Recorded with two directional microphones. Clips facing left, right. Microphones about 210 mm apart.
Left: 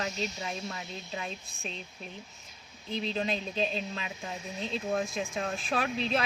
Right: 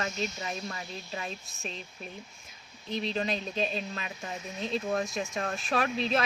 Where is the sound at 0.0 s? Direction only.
Centre (ahead or behind).